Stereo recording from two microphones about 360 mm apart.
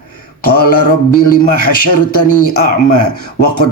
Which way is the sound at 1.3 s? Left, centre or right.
Left.